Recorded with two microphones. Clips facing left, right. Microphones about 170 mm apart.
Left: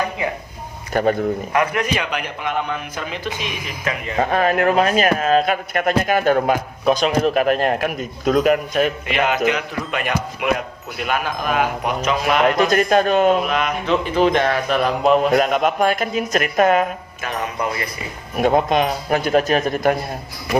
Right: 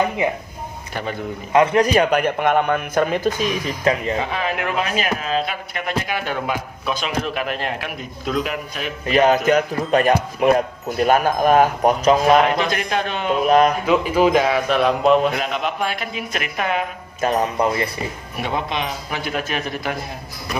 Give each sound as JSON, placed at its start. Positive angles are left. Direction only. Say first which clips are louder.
{"t": 0.2, "sound": "speech", "louder": "right 3 dB", "side_deg": -20}
{"t": 0.9, "sound": "speech", "louder": "left 10 dB", "side_deg": 45}
{"t": 1.5, "sound": "speech", "louder": "right 8 dB", "side_deg": -30}
{"t": 4.2, "sound": "speech", "louder": "left 6 dB", "side_deg": 50}
{"t": 9.0, "sound": "speech", "louder": "right 4 dB", "side_deg": -40}
{"t": 12.5, "sound": "speech", "louder": "left 6 dB", "side_deg": 45}
{"t": 13.4, "sound": "speech", "louder": "right 7 dB", "side_deg": -40}
{"t": 13.8, "sound": "a man's voice", "louder": "right 1 dB", "side_deg": -5}
{"t": 15.3, "sound": "speech", "louder": "left 7 dB", "side_deg": 45}
{"t": 17.2, "sound": "speech", "louder": "right 7 dB", "side_deg": -40}
{"t": 18.3, "sound": "speech", "louder": "left 8 dB", "side_deg": 45}